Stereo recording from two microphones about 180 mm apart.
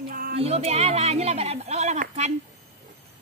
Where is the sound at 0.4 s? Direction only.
35° right (ahead or behind).